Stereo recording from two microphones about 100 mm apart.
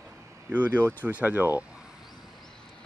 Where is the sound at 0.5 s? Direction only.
15° right (ahead or behind).